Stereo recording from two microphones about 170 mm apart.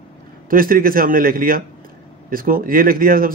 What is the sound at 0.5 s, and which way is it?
Speech, 55° right (ahead or behind).